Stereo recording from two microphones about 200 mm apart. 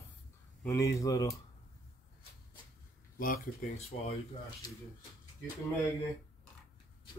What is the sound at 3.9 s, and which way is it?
Speech, 40° left (ahead or behind).